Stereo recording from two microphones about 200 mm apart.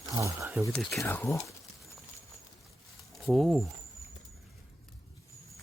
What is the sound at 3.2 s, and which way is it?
Speech, centre (ahead or behind).